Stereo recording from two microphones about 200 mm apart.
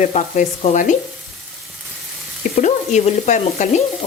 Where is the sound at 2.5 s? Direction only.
35° left (ahead or behind).